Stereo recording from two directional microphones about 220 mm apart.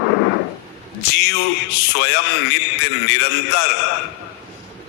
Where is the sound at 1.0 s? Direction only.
50° left (ahead or behind).